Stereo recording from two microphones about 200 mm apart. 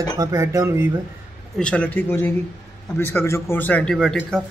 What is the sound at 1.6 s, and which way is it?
A man's voice, 5° left (ahead or behind).